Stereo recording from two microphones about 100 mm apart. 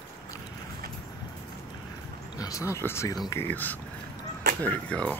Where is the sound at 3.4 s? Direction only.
20° left (ahead or behind).